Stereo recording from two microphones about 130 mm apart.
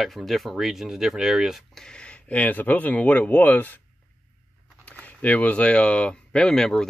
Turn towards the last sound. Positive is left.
turn(degrees=5)  # may be behind; listen again after turning